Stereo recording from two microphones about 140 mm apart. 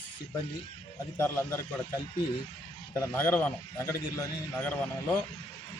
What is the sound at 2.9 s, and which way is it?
A man's voice, 15° left (ahead or behind).